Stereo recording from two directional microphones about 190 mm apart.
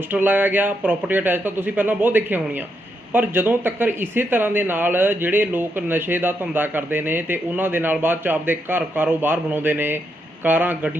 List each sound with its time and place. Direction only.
0.1 s speech: 10° right (ahead or behind)